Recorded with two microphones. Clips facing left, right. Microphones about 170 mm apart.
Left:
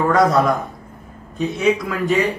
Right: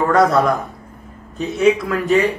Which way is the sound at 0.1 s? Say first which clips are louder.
Right 2 dB; centre (ahead or behind).